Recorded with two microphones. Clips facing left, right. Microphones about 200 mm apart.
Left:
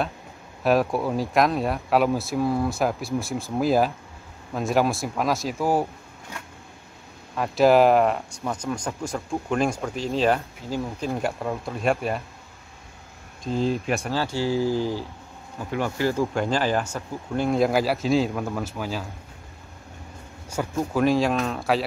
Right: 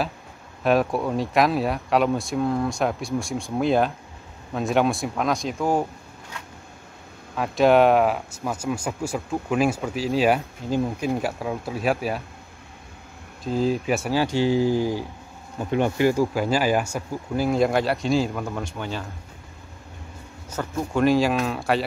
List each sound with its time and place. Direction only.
0.7 s speech: centre (ahead or behind)
7.3 s speech: centre (ahead or behind)
13.4 s speech: 5° right (ahead or behind)
14.1 s speech: 15° right (ahead or behind); by 19.0 s 5° left (ahead or behind)
20.4 s speech: 10° left (ahead or behind)
21.0 s speech: centre (ahead or behind)